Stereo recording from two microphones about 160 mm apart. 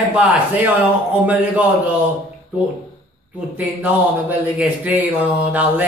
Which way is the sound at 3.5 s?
10° right (ahead or behind).